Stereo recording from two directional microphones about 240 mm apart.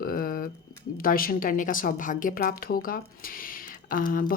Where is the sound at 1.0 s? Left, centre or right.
Left.